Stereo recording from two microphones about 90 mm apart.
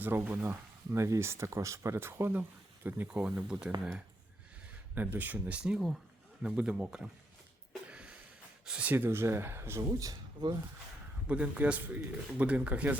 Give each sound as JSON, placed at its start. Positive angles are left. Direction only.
{"t": 0.3, "sound": "speech", "side_deg": -30}
{"t": 3.1, "sound": "speech", "side_deg": -10}
{"t": 4.9, "sound": "speech", "side_deg": -20}
{"t": 5.7, "sound": "speech", "side_deg": -5}
{"t": 7.9, "sound": "a sound", "side_deg": -10}
{"t": 8.6, "sound": "speech", "side_deg": -10}
{"t": 8.9, "sound": "speech", "side_deg": -25}
{"t": 11.3, "sound": "speech", "side_deg": -15}